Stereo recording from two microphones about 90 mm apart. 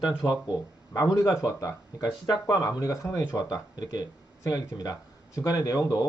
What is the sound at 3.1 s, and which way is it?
Speech, 45° left (ahead or behind).